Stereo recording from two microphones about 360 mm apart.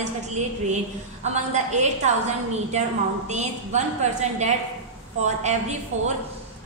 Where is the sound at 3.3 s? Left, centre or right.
Centre.